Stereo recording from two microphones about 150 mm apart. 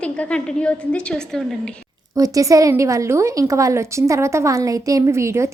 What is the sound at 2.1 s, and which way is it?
Speech, 20° right (ahead or behind).